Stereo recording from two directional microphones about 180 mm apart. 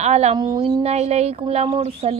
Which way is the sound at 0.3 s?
25° right (ahead or behind).